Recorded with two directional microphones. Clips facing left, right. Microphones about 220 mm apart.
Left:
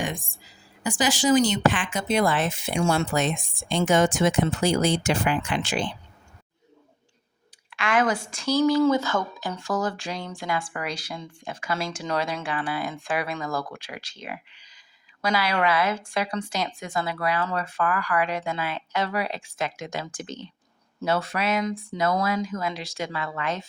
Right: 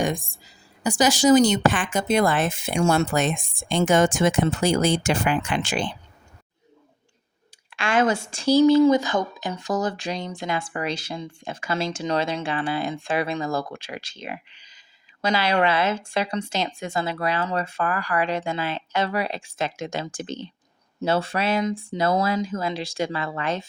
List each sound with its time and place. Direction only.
0.9 s speech: 40° right (ahead or behind)
7.7 s speech: 30° right (ahead or behind)
8.8 s speech: 15° right (ahead or behind)